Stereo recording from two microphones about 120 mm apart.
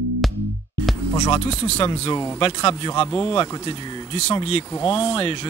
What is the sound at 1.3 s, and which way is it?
Speech, 55° left (ahead or behind).